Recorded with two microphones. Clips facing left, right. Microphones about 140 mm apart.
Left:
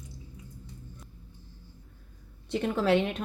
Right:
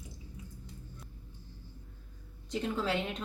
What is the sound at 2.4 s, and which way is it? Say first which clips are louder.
Speech: left 7 dB; 65° left (ahead or behind).